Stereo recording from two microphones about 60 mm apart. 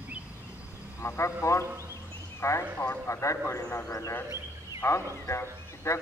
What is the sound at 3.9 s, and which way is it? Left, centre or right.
Speech, left.